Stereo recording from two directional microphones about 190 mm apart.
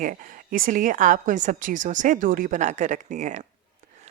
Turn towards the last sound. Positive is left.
turn(degrees=-40)  # may be behind; listen again after turning